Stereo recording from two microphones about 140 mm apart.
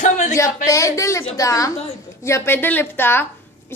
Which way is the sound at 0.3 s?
20° left (ahead or behind).